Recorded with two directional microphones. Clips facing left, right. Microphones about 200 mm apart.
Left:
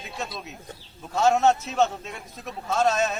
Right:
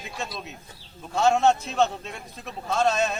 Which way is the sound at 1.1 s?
5° left (ahead or behind).